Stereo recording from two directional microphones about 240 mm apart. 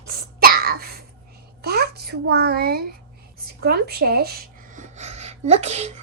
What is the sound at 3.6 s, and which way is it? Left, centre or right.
A child's voice, right.